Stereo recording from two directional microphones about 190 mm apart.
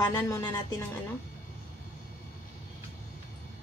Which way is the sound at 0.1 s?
15° left (ahead or behind).